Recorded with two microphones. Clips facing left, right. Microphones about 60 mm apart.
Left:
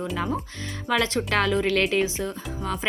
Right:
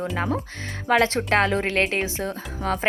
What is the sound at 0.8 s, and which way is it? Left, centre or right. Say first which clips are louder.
Speech: right 4 dB; right.